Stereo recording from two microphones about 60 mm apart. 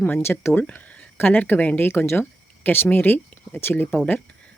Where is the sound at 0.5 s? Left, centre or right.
Left.